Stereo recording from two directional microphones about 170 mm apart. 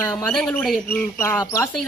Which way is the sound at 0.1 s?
10° left (ahead or behind).